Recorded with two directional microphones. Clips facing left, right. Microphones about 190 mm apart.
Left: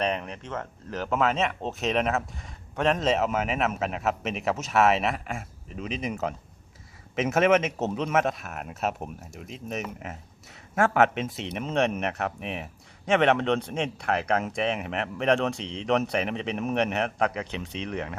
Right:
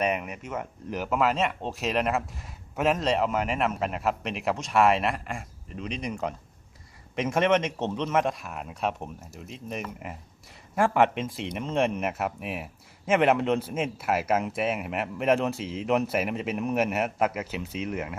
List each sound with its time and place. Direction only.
0.0 s speech: 10° right (ahead or behind)